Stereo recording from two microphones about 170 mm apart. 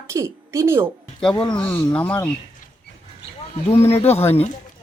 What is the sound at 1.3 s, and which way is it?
Speech, 30° left (ahead or behind).